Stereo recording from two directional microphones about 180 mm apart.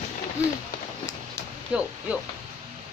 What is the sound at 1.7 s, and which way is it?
Speech, 5° right (ahead or behind).